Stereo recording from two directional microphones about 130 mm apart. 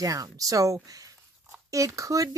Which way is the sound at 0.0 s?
25° right (ahead or behind).